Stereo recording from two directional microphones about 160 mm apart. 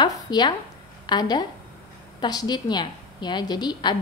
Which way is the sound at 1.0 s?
25° left (ahead or behind).